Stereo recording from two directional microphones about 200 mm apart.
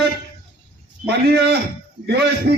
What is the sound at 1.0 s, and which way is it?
A man's voice, 55° right (ahead or behind).